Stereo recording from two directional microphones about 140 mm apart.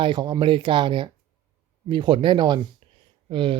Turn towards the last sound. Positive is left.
turn(degrees=-40)  # may be behind; listen again after turning